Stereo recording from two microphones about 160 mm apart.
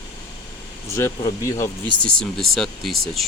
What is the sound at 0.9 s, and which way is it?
Speech, 15° left (ahead or behind).